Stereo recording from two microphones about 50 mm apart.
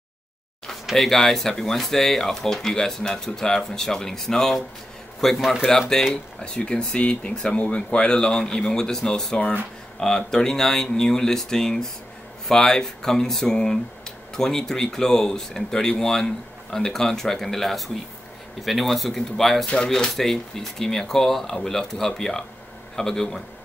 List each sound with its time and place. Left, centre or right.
0.9 s speech: centre
5.4 s speech: centre
5.7 s speech: centre